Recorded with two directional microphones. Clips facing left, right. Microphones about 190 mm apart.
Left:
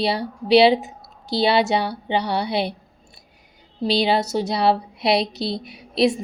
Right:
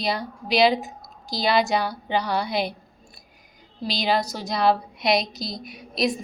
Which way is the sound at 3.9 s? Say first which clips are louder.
Left 5 dB; 30° left (ahead or behind).